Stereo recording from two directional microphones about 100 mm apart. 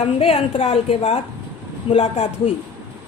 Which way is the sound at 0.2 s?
75° left (ahead or behind).